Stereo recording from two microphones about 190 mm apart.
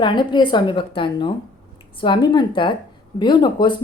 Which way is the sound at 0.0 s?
25° left (ahead or behind).